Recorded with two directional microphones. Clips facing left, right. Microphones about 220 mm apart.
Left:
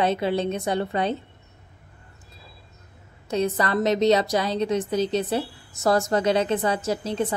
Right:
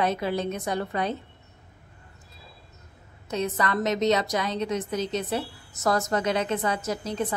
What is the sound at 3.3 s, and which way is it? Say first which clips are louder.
A woman's voice: left 4 dB; 30° left (ahead or behind).